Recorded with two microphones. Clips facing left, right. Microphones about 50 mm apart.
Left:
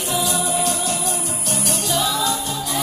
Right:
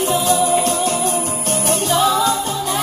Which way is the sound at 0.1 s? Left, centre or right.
Right.